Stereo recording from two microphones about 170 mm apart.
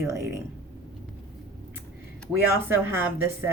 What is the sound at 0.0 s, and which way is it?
Speech, 15° right (ahead or behind).